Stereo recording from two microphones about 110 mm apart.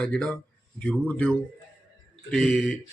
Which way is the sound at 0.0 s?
10° left (ahead or behind).